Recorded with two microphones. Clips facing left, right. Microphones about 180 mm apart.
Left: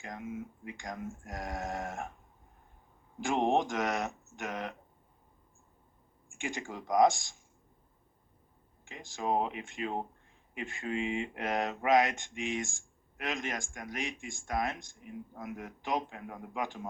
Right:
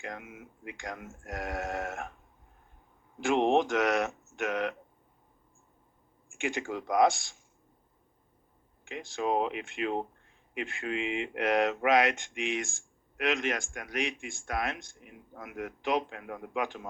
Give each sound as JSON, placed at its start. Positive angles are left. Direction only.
{"t": 0.0, "sound": "speech", "side_deg": -70}
{"t": 3.2, "sound": "speech", "side_deg": -75}
{"t": 6.3, "sound": "speech", "side_deg": -70}
{"t": 8.9, "sound": "speech", "side_deg": -75}